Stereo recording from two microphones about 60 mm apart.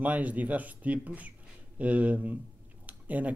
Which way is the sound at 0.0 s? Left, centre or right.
Right.